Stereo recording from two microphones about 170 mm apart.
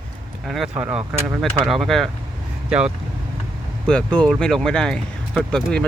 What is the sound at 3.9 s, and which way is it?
Speech, 5° left (ahead or behind).